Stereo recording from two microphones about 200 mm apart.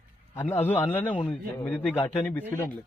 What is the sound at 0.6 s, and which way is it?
A man's voice, 10° left (ahead or behind).